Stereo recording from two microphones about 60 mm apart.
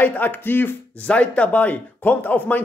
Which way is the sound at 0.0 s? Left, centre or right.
Left.